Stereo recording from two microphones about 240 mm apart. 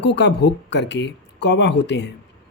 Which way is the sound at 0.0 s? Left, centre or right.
Left.